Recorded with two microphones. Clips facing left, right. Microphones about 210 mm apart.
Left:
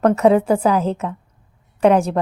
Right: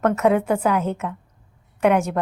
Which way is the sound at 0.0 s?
30° left (ahead or behind).